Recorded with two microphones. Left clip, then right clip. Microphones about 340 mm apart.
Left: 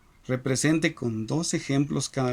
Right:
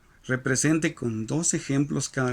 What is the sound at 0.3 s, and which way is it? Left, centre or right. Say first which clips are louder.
Speech: right 1 dB; centre.